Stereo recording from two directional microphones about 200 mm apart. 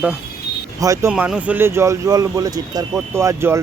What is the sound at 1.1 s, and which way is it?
Speech, 5° right (ahead or behind).